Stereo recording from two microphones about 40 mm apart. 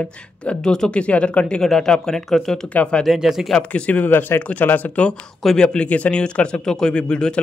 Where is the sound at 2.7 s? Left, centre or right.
Left.